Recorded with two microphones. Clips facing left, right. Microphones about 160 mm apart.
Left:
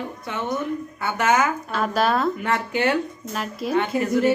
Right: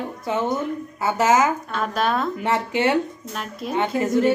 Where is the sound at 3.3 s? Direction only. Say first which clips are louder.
Left 3 dB; 5° left (ahead or behind).